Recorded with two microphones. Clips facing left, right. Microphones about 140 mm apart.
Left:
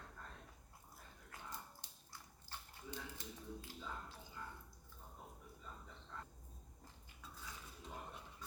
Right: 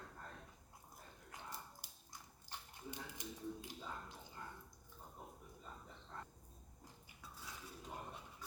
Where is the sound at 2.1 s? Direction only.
15° right (ahead or behind).